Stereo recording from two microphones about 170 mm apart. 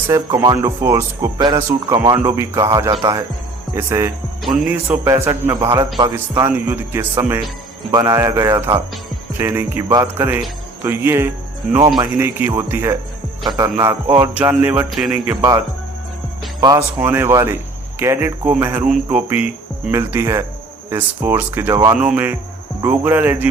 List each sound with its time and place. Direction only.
0.1 s speech: 20° right (ahead or behind)
1.5 s speech: 25° right (ahead or behind)
2.0 s speech: 15° right (ahead or behind)
16.6 s speech: 15° right (ahead or behind)
21.9 s speech: 5° right (ahead or behind)